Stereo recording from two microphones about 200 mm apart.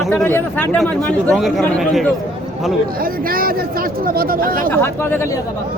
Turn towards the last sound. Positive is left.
turn(degrees=15)  # may be behind; listen again after turning